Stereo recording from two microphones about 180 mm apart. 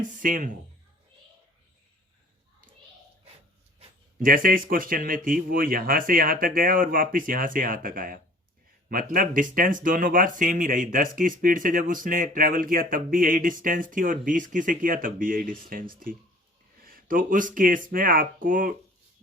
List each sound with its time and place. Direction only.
0.2 s speech: 50° right (ahead or behind)
4.2 s speech: 50° right (ahead or behind)